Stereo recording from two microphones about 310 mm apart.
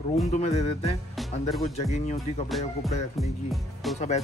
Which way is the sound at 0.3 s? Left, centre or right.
Left.